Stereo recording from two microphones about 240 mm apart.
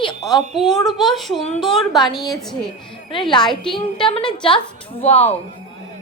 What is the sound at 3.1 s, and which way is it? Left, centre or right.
Speech, centre.